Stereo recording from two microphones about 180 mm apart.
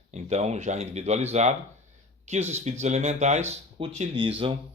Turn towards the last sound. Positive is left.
turn(degrees=-30)  # may be behind; listen again after turning